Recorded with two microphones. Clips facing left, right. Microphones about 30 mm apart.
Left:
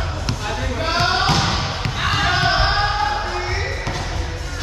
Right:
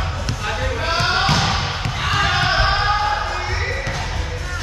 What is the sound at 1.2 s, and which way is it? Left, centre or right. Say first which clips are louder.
Basketball bounce: even; centre.